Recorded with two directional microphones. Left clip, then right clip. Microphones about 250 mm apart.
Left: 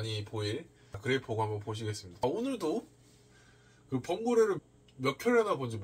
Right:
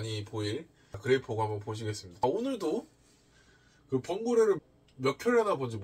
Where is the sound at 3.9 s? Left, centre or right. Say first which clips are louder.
Right 1 dB; centre.